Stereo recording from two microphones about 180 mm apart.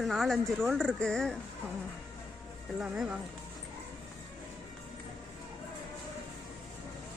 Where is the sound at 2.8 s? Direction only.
5° right (ahead or behind).